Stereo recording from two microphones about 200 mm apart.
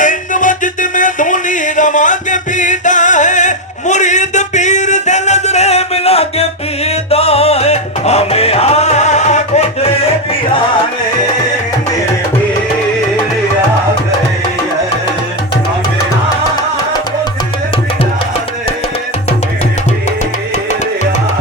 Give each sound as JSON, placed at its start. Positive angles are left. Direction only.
{"t": 0.0, "sound": "music", "side_deg": 40}